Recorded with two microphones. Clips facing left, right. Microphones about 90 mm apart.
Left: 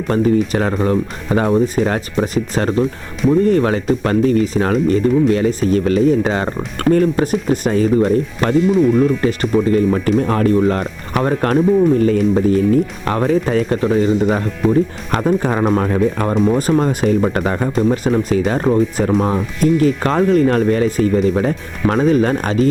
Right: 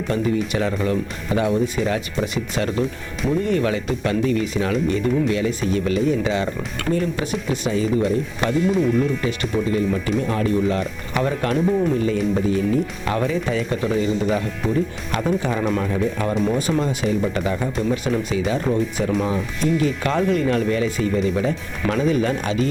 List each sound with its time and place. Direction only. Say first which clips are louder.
0.1 s speech: left 7 dB; 45° left (ahead or behind)
17.8 s speech: left 6 dB; 40° left (ahead or behind)